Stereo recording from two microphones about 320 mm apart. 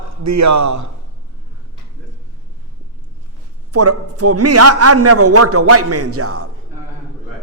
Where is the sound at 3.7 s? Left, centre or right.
Right.